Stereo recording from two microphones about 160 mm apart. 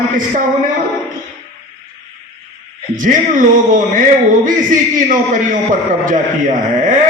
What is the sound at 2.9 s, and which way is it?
A man's voice, 55° right (ahead or behind).